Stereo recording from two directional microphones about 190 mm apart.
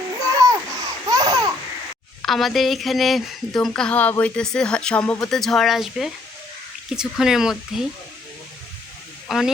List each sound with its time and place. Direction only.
0.3 s babbling: 15° right (ahead or behind)
2.2 s speech: centre (ahead or behind)
9.3 s speech: centre (ahead or behind)